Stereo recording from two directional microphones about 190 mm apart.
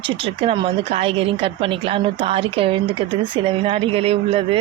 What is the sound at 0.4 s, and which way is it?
Speech, 30° right (ahead or behind).